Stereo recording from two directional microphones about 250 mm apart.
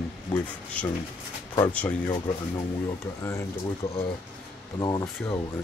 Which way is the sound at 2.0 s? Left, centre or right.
Centre.